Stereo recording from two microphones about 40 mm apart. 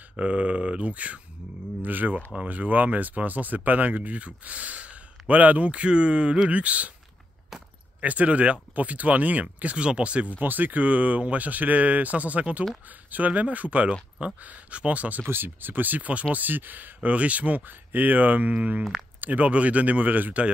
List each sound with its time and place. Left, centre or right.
0.1 s speech: right
1.8 s speech: right
8.0 s speech: right
10.4 s speech: right
15.2 s speech: right
16.3 s speech: right